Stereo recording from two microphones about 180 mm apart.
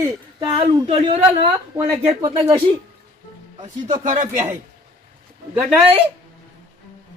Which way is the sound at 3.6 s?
45° right (ahead or behind).